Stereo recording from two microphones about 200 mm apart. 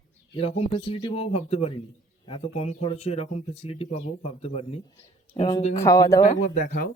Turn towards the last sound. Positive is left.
turn(degrees=45)  # may be behind; listen again after turning